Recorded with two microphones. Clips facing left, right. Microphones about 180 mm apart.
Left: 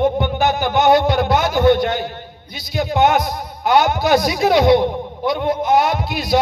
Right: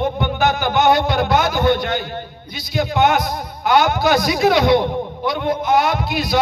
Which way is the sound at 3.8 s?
35° left (ahead or behind).